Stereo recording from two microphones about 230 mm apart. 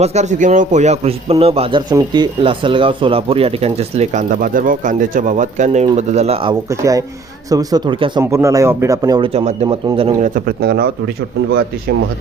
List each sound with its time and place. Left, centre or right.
0.0 s a man's voice: right